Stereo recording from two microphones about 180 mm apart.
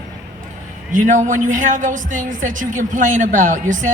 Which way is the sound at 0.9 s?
45° right (ahead or behind).